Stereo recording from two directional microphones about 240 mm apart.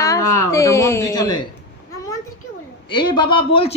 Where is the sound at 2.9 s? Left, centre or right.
Centre.